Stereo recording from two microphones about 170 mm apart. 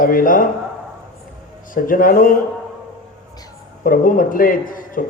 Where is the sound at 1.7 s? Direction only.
55° left (ahead or behind).